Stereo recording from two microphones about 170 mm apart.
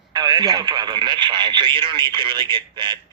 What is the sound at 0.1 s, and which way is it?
Speech, 25° right (ahead or behind).